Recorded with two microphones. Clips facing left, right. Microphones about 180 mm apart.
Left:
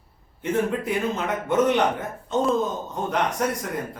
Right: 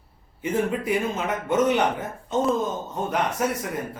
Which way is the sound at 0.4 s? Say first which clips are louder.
Even; 10° right (ahead or behind).